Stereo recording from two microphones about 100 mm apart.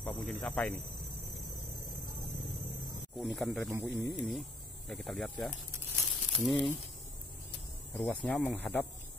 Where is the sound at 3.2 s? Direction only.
Centre (ahead or behind).